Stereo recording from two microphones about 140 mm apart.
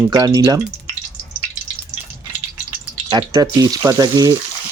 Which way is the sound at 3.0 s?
30° right (ahead or behind).